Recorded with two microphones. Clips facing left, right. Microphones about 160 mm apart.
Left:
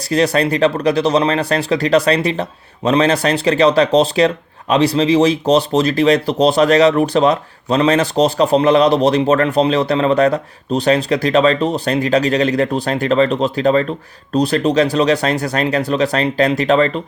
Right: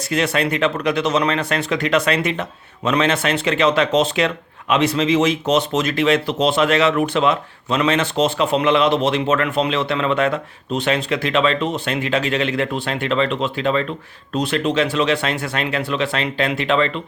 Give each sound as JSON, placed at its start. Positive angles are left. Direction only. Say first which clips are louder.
{"t": 0.0, "sound": "speech", "louder": "left 5 dB", "side_deg": 35}